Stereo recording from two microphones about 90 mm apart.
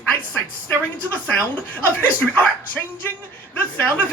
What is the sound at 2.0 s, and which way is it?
Speech, 20° left (ahead or behind).